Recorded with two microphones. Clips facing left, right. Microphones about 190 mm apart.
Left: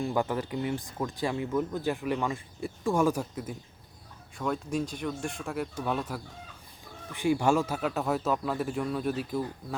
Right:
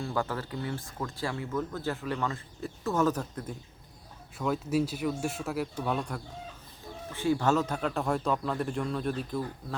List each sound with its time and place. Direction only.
0.0 s speech: 15° left (ahead or behind)
4.4 s speech: 5° right (ahead or behind)
7.1 s speech: 15° left (ahead or behind)